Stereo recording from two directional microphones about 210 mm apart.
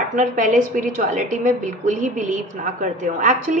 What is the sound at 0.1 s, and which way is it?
A woman's voice, 40° right (ahead or behind).